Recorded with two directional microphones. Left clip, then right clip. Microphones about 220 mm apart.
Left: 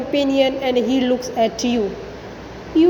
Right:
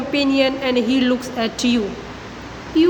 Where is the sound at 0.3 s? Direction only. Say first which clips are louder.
Left 1 dB; centre (ahead or behind).